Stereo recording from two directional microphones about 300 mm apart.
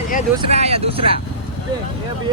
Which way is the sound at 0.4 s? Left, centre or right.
Right.